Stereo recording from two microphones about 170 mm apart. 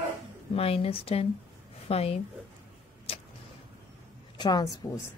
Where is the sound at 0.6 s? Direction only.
35° left (ahead or behind).